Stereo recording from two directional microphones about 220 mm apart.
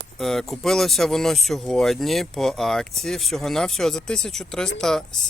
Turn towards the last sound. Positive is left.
turn(degrees=0)  # may be behind; listen again after turning